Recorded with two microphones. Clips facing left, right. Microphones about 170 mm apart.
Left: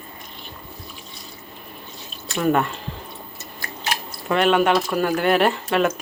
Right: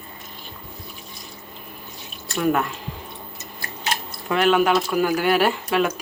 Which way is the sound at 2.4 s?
Centre (ahead or behind).